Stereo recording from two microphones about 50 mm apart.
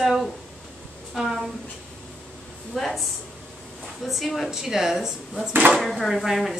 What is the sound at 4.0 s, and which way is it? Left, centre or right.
A woman's voice, centre.